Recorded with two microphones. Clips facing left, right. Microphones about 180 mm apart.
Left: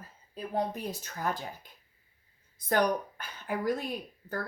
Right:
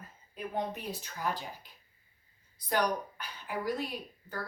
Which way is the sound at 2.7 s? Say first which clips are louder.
Left 3 dB; 50° left (ahead or behind).